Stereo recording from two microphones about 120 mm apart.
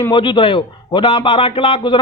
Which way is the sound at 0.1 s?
40° left (ahead or behind).